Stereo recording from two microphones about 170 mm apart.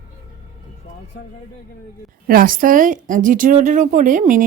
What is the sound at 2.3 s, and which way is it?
Speech, 55° right (ahead or behind).